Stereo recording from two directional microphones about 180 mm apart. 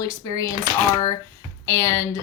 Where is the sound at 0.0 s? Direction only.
20° left (ahead or behind).